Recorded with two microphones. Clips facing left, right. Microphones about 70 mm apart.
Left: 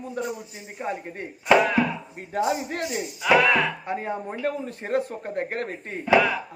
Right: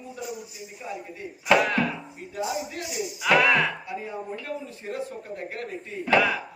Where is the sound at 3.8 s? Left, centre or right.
Left.